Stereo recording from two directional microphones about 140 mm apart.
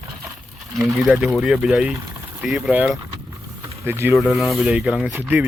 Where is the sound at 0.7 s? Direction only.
5° right (ahead or behind).